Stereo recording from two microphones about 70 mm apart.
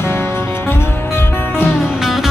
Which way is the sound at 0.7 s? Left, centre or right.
Left.